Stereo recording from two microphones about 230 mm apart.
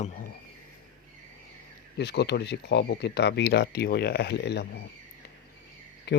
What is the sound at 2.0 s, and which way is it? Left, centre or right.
Speech, left.